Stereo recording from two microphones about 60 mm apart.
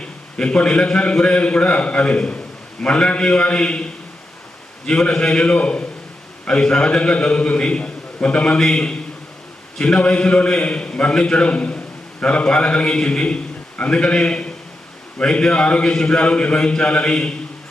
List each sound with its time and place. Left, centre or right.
0.0 s a man's voice: centre
4.9 s a man's voice: centre